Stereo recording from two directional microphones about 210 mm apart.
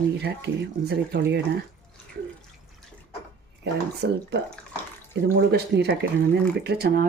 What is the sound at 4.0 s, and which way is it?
Speech, 55° right (ahead or behind).